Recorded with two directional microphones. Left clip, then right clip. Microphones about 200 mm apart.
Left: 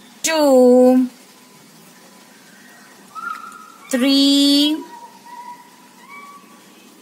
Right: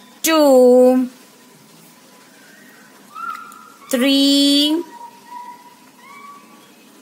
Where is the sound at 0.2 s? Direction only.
25° right (ahead or behind).